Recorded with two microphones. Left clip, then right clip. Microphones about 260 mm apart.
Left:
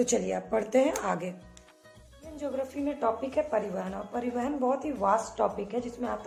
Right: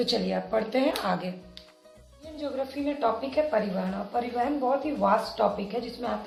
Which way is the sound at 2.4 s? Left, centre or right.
Left.